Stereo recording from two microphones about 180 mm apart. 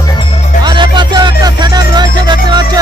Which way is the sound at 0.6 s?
25° right (ahead or behind).